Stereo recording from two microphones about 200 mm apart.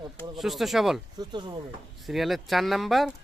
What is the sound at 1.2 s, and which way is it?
Speech, 20° right (ahead or behind).